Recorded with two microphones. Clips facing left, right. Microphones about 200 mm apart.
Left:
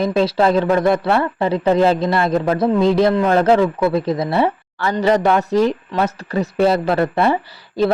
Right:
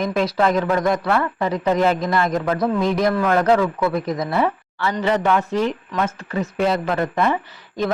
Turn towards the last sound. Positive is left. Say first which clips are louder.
# left 6 dB
turn(degrees=35)  # may be behind; listen again after turning